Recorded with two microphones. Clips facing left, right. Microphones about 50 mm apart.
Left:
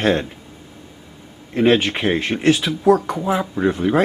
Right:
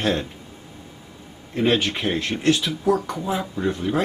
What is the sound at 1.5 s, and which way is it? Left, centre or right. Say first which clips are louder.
Speech: left 5 dB; centre.